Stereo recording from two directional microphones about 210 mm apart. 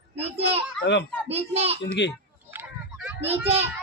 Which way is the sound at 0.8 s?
55° left (ahead or behind).